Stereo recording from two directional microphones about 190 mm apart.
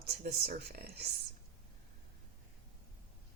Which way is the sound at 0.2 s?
55° right (ahead or behind).